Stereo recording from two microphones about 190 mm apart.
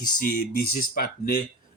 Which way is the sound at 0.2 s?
45° left (ahead or behind).